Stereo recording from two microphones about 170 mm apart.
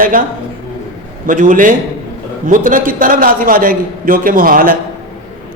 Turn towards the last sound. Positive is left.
turn(degrees=-55)  # may be behind; listen again after turning